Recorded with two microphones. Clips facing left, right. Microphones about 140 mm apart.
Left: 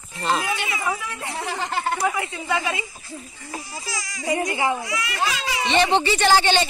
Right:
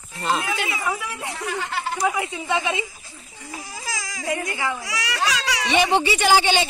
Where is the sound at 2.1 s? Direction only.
15° right (ahead or behind).